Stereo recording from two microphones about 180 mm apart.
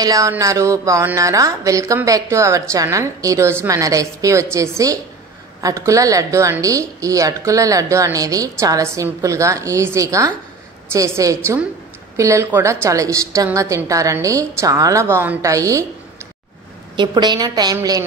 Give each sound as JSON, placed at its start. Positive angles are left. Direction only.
{"t": 0.0, "sound": "a woman's voice", "side_deg": -20}
{"t": 16.9, "sound": "a woman's voice", "side_deg": -25}